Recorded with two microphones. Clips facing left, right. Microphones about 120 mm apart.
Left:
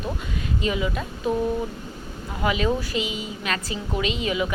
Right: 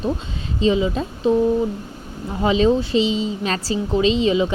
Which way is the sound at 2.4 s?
25° right (ahead or behind).